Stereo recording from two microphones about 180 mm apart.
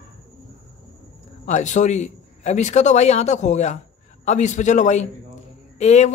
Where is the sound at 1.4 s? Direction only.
40° left (ahead or behind).